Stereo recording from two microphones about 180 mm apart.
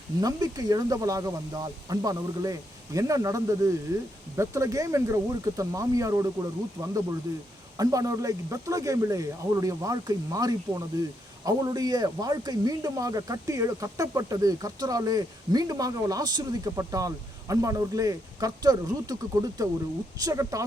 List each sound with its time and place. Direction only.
0.2 s speech: 20° right (ahead or behind)